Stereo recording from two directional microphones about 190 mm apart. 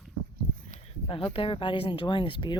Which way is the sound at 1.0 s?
30° left (ahead or behind).